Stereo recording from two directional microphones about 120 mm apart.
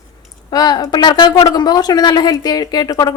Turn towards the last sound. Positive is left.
turn(degrees=35)  # may be behind; listen again after turning